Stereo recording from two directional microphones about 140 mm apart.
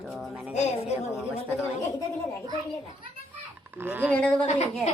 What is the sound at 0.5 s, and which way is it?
Speech, 55° left (ahead or behind).